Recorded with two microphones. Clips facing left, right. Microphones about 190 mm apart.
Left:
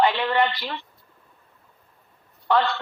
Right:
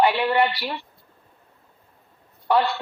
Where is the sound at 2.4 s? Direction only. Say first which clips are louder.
Right 1 dB; 10° right (ahead or behind).